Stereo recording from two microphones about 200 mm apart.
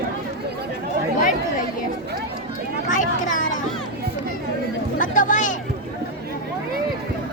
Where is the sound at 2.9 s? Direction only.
40° left (ahead or behind).